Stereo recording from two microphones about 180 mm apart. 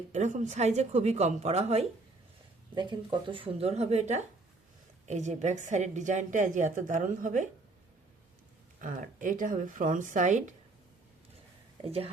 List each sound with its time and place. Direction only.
0.1 s a woman's voice: 40° right (ahead or behind)
2.7 s a woman's voice: 25° right (ahead or behind); by 7.4 s 45° right (ahead or behind)
8.8 s a woman's voice: 45° right (ahead or behind)
11.9 s a woman's voice: 35° right (ahead or behind)